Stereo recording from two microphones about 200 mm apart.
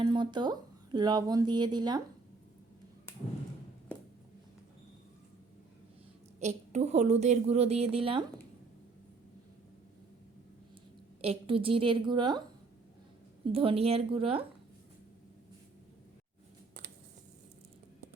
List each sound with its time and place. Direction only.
0.0 s speech: 20° right (ahead or behind)
6.4 s a woman's voice: 35° right (ahead or behind)
11.2 s a woman's voice: 30° right (ahead or behind)
13.5 s a woman's voice: 30° right (ahead or behind)